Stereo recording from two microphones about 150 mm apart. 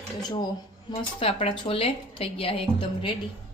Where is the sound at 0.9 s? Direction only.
40° left (ahead or behind).